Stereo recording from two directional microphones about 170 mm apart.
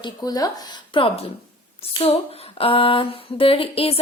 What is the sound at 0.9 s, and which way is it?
Speech, 35° left (ahead or behind).